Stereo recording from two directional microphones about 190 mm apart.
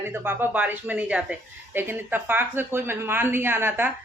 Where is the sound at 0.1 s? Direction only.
10° right (ahead or behind).